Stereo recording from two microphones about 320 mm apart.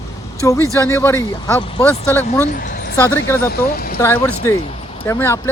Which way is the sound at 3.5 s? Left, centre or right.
Left.